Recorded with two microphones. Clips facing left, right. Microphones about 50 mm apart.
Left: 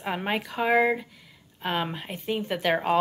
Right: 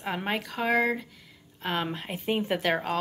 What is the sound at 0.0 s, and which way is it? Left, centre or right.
A woman's voice, centre.